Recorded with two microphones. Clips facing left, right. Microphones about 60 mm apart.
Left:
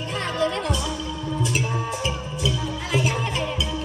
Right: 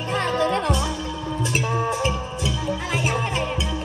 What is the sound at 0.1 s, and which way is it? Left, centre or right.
Music, right.